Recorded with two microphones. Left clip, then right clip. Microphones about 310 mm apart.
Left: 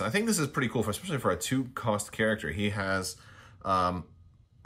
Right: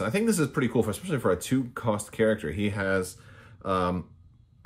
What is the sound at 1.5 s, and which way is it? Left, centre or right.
Speech, centre.